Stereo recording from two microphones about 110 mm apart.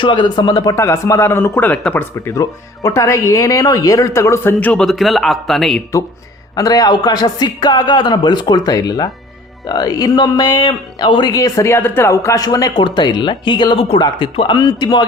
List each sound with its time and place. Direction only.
0.0 s speech: 45° left (ahead or behind); by 2.0 s 15° left (ahead or behind)
2.1 s speech: 30° left (ahead or behind)
4.6 s a man's voice: 10° left (ahead or behind)
4.9 s a man's voice: centre (ahead or behind)
6.6 s speech: 35° left (ahead or behind)
12.7 s speech: 45° left (ahead or behind)